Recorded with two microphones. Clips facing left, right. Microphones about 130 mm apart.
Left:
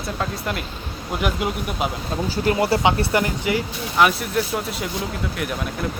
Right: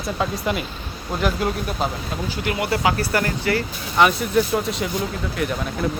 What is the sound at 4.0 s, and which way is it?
Speech, centre (ahead or behind).